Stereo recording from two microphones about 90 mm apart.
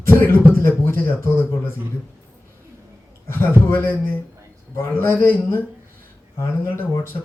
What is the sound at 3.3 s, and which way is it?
Speech, 25° left (ahead or behind).